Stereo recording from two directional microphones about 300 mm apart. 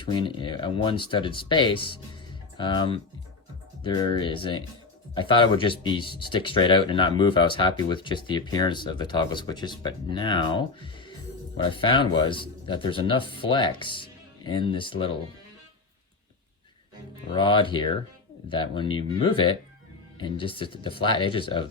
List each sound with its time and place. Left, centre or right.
0.0 s speech: centre
17.3 s speech: centre